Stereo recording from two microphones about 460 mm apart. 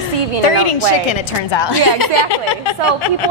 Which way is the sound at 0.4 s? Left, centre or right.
Left.